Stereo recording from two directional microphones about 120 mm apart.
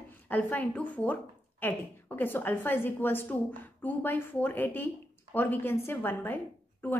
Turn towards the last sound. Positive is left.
turn(degrees=15)  # may be behind; listen again after turning